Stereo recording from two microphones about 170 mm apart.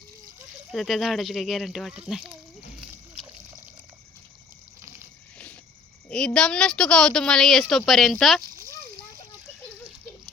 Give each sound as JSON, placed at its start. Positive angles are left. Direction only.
{"t": 0.7, "sound": "speech", "side_deg": 0}
{"t": 6.1, "sound": "speech", "side_deg": 5}
{"t": 8.4, "sound": "a sound", "side_deg": -55}